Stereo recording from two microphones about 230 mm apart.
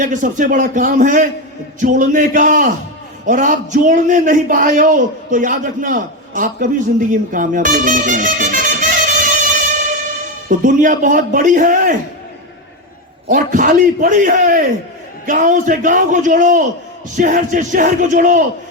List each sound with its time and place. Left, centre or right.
0.0 s a man's voice: right
10.5 s a man's voice: right
13.2 s a man's voice: right